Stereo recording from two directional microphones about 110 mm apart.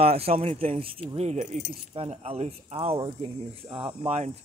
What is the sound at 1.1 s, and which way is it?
Speech, 80° right.